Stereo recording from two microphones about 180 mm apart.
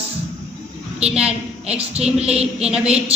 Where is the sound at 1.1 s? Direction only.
5° right (ahead or behind).